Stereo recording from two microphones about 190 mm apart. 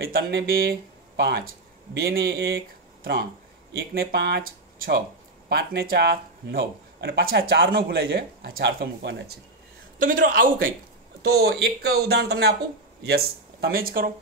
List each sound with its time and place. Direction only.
0.0 s speech: 55° right (ahead or behind)
9.9 s speech: 45° right (ahead or behind)
11.2 s speech: 55° right (ahead or behind)